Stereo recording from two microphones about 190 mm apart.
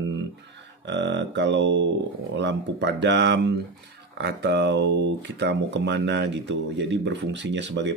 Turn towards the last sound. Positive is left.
turn(degrees=-70)  # may be behind; listen again after turning